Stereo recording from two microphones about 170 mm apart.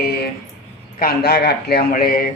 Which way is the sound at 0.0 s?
65° left (ahead or behind).